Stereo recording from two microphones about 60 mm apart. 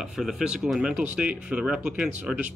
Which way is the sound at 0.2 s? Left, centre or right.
Centre.